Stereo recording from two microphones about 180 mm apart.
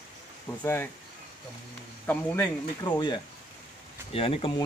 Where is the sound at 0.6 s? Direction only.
15° left (ahead or behind).